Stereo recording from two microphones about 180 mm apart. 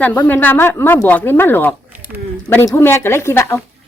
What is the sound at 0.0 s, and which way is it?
Speech, 10° left (ahead or behind).